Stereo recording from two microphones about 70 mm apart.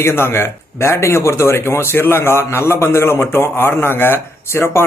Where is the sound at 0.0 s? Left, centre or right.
Left.